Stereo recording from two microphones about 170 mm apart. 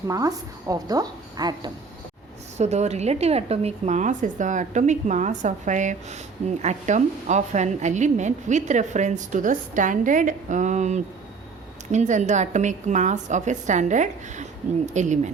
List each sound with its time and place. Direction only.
0.1 s a woman's voice: 20° right (ahead or behind)
2.6 s a woman's voice: 40° right (ahead or behind)